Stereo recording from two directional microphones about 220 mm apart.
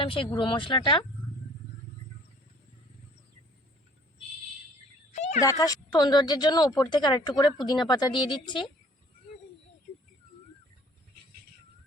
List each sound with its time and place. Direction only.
0.0 s a woman's voice: 25° left (ahead or behind)
5.1 s cat: 30° left (ahead or behind)
5.4 s a woman's voice: 15° left (ahead or behind)